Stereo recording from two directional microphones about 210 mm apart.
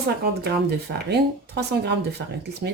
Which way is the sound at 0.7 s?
50° right (ahead or behind).